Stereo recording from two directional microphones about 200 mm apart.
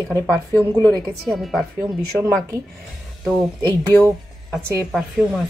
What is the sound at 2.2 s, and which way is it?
Speech, 15° right (ahead or behind).